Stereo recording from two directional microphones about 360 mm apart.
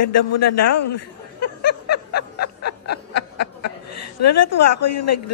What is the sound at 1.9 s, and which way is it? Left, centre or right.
Snicker, left.